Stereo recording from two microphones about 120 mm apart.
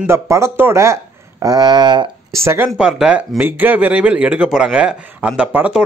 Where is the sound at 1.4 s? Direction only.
35° right (ahead or behind).